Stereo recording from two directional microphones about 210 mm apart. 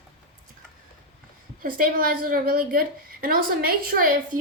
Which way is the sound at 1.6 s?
40° right (ahead or behind).